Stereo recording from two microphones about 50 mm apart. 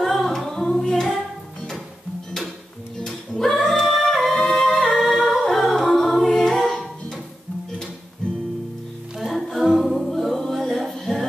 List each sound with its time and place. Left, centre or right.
0.0 s music: centre
3.0 s music: centre
4.9 s a capella: centre
9.2 s music: centre